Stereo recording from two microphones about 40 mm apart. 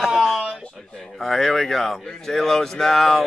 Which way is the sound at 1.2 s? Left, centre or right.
Centre.